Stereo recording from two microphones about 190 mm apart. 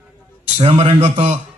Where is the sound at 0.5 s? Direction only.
30° right (ahead or behind).